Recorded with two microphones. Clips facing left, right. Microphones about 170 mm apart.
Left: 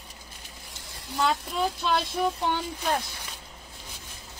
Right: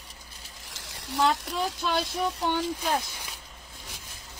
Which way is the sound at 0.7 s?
85° right.